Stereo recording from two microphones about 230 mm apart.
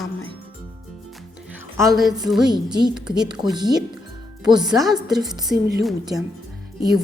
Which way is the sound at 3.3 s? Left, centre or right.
Centre.